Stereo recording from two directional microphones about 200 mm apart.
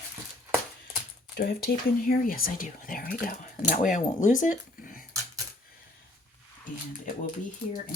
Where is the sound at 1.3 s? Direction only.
50° left (ahead or behind).